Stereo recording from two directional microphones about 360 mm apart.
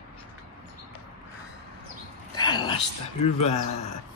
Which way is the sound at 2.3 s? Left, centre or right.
Centre.